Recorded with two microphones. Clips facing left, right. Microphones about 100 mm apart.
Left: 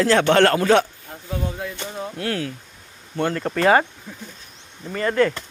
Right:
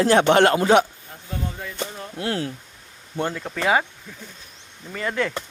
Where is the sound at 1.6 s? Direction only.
10° left (ahead or behind).